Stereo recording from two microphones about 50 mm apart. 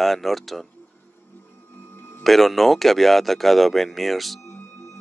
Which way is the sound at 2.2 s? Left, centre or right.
Centre.